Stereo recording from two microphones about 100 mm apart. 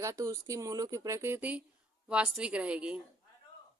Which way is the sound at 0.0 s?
30° right (ahead or behind).